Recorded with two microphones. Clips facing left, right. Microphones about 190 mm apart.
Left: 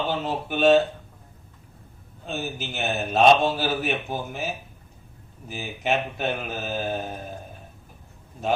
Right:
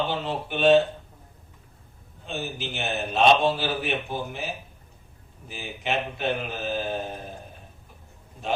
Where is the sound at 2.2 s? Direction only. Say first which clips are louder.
Left 1 dB; 40° left (ahead or behind).